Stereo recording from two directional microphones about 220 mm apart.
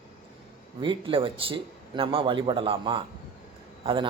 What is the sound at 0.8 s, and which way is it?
A man's voice, 20° right (ahead or behind).